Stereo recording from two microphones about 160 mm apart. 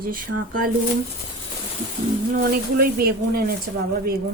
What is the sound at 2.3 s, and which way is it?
Speech, 65° right (ahead or behind).